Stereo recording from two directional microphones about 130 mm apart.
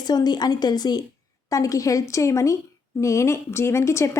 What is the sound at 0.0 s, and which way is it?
A woman's voice, 30° left (ahead or behind).